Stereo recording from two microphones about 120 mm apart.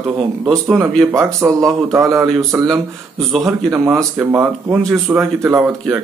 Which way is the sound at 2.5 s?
10° right (ahead or behind).